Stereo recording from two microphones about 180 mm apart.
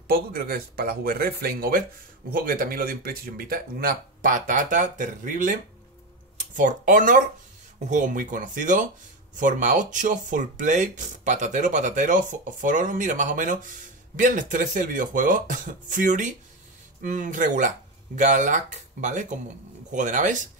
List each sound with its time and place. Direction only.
0.3 s speech: 55° right (ahead or behind)